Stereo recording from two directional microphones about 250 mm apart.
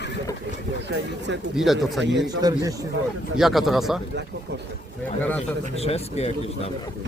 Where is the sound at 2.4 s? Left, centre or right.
Centre.